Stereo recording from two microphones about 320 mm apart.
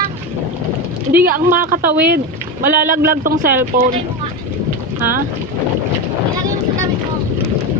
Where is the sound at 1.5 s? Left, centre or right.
Right.